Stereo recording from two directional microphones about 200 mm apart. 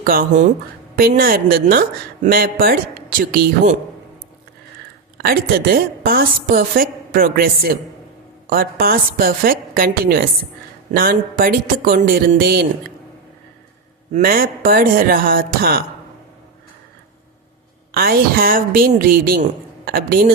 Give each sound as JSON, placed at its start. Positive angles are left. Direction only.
{"t": 0.0, "sound": "a woman's voice", "side_deg": -45}
{"t": 5.1, "sound": "a woman's voice", "side_deg": -50}
{"t": 14.1, "sound": "a woman's voice", "side_deg": -45}
{"t": 17.9, "sound": "a woman's voice", "side_deg": -50}